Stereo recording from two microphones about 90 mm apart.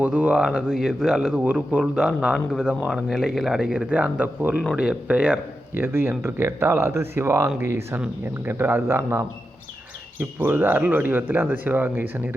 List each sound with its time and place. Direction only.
0.0 s speech: 15° right (ahead or behind)
5.7 s speech: 25° right (ahead or behind)